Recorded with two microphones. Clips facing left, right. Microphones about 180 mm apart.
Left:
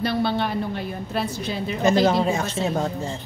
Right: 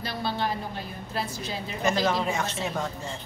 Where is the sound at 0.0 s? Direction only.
65° left (ahead or behind).